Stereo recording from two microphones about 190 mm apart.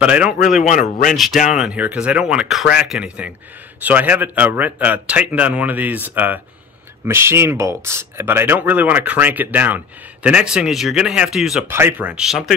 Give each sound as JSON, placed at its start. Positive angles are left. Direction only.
{"t": 0.0, "sound": "speech", "side_deg": -5}
{"t": 0.7, "sound": "speech", "side_deg": 40}
{"t": 1.1, "sound": "speech", "side_deg": 0}